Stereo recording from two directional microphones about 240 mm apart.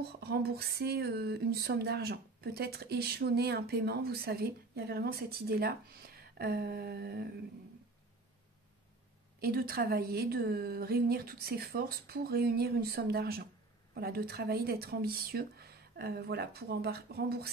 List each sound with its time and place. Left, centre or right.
0.2 s speech: right
9.4 s speech: right